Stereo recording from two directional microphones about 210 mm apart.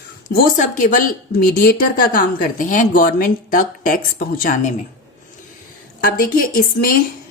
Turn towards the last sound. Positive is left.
turn(degrees=40)  # may be behind; listen again after turning